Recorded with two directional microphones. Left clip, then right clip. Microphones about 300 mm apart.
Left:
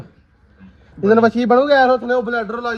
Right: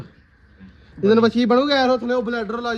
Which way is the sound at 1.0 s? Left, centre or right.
Centre.